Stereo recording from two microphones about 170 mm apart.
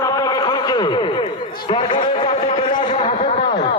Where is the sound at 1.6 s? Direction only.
30° left (ahead or behind).